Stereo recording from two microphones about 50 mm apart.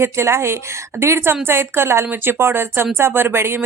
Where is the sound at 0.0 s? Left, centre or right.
Right.